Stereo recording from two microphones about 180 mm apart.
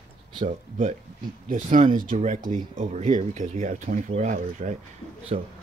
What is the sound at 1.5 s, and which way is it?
A man's voice, 45° right (ahead or behind).